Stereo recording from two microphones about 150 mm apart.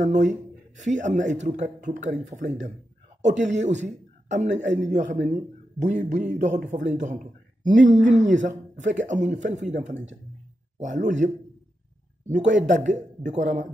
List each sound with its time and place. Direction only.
0.0 s speech: 55° right (ahead or behind)